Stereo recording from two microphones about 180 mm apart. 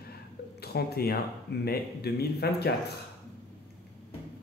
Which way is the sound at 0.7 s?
60° left (ahead or behind).